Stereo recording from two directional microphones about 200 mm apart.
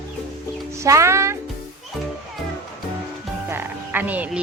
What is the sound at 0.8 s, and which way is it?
Speech, 15° right (ahead or behind).